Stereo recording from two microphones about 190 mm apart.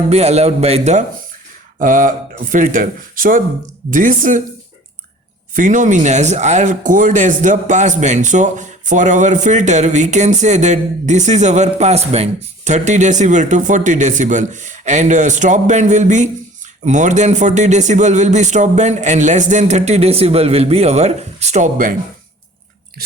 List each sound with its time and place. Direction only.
0.1 s speech: 35° right (ahead or behind)
5.5 s speech: 40° right (ahead or behind)